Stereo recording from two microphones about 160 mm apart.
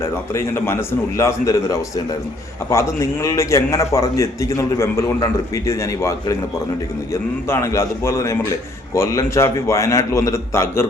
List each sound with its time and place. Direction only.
0.0 s a man's voice: 15° left (ahead or behind)